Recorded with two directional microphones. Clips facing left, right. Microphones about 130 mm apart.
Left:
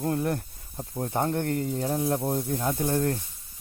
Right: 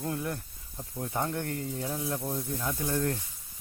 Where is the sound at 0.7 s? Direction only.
35° left (ahead or behind).